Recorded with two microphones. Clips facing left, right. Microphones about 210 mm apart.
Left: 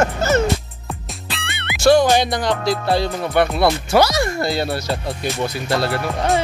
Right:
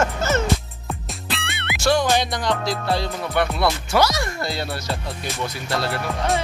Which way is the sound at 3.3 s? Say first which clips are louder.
Left 5 dB; 35° left (ahead or behind).